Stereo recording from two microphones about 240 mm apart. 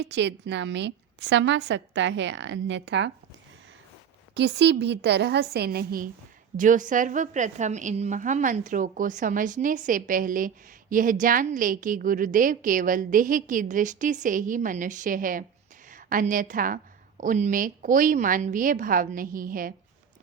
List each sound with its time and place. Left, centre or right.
0.0 s a woman's voice: right
4.4 s a woman's voice: right